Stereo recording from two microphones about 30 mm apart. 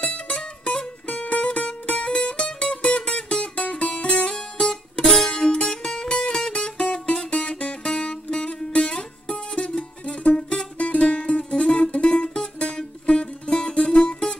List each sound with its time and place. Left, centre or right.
0.0 s music: left
1.0 s music: left
7.8 s music: left
10.3 s music: left
10.8 s music: left